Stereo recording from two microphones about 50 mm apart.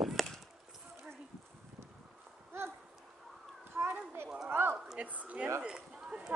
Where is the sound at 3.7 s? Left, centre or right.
Right.